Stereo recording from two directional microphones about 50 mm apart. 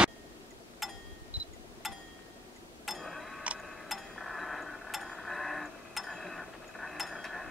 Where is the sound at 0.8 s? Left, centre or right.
Centre.